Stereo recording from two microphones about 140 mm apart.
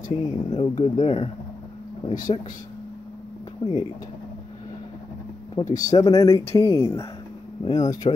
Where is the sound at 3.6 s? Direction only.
40° left (ahead or behind).